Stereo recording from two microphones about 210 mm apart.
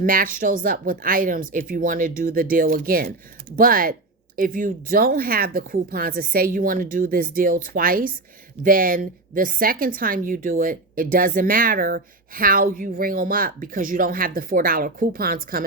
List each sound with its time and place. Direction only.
0.0 s a woman's voice: 40° right (ahead or behind)